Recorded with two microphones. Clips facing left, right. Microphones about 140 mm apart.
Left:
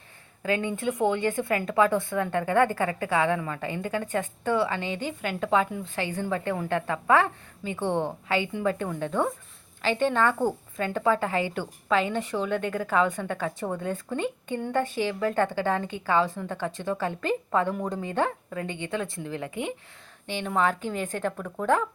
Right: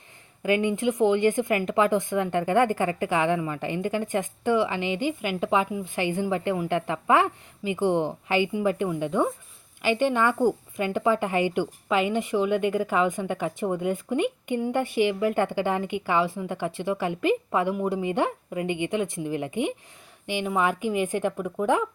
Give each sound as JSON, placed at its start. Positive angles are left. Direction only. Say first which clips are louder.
{"t": 0.4, "sound": "a woman's voice", "louder": "right 4 dB", "side_deg": -15}